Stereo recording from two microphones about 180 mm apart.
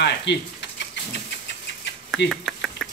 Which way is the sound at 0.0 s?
75° left (ahead or behind).